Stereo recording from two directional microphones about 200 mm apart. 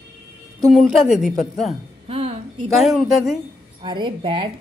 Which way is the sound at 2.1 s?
30° right (ahead or behind).